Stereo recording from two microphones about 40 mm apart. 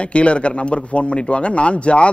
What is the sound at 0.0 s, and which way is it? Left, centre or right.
A man's voice, left.